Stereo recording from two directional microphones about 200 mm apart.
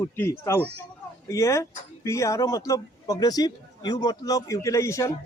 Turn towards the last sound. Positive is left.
turn(degrees=15)  # may be behind; listen again after turning